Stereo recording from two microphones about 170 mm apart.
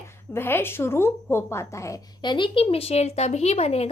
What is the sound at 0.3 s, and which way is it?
A woman's voice, 15° left (ahead or behind).